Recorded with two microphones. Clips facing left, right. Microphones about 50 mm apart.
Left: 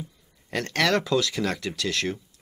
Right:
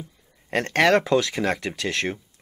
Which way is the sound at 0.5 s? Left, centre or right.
Right.